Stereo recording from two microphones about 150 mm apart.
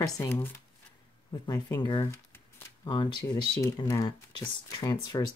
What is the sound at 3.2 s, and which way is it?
Speech, 20° left (ahead or behind).